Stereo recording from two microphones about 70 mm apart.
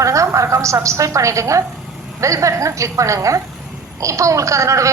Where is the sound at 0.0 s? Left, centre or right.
Right.